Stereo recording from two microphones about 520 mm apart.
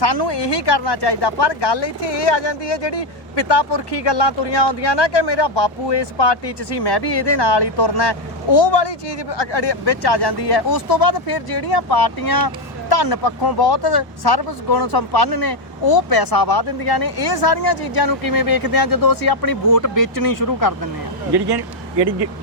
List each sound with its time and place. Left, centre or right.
0.0 s speech: left
21.3 s speech: right